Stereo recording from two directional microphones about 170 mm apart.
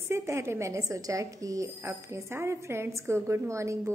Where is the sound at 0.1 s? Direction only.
15° right (ahead or behind).